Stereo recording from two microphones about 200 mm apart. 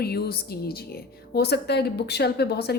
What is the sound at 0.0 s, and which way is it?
A woman's voice, 50° left (ahead or behind).